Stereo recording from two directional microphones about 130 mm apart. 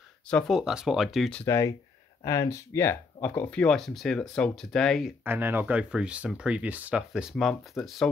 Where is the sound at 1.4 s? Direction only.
20° left (ahead or behind); by 5.1 s centre (ahead or behind).